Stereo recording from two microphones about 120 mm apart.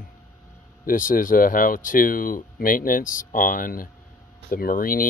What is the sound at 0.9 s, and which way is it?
Speech, 90° left.